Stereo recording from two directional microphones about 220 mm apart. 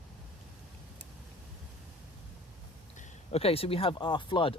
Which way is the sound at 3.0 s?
25° left (ahead or behind).